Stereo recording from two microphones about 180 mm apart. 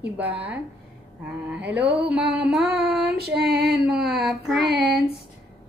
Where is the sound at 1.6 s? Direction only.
70° right (ahead or behind).